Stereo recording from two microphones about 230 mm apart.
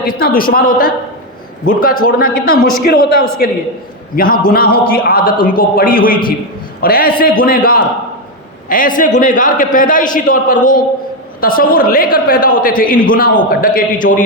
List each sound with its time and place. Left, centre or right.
0.0 s a man's voice: left